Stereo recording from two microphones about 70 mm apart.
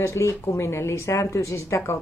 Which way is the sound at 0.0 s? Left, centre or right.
Left.